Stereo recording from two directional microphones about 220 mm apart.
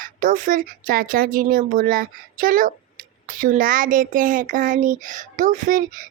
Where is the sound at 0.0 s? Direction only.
35° right (ahead or behind).